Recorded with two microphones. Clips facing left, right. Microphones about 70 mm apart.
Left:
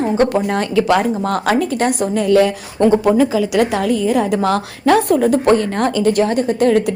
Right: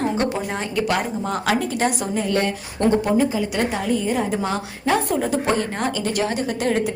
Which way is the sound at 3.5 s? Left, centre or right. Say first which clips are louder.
Left 6 dB; left.